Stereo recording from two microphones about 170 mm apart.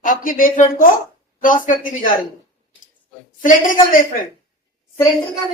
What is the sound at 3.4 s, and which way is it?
Speech, 50° left (ahead or behind).